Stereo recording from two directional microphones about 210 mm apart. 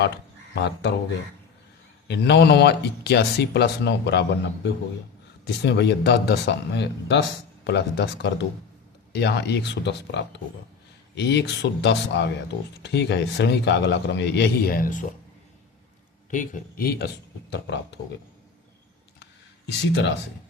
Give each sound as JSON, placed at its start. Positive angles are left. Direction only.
{"t": 0.5, "sound": "speech", "side_deg": 55}
{"t": 2.0, "sound": "speech", "side_deg": 55}
{"t": 16.3, "sound": "speech", "side_deg": 40}
{"t": 19.2, "sound": "a sound", "side_deg": 55}